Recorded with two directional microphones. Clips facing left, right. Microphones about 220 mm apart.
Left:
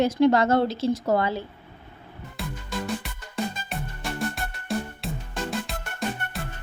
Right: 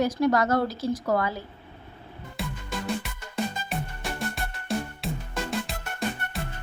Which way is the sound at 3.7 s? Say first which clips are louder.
Even; centre (ahead or behind).